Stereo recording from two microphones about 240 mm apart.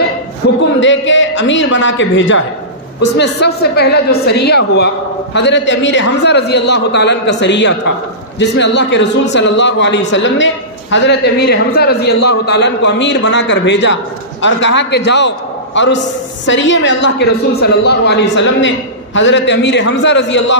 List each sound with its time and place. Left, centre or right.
0.4 s a man's voice: left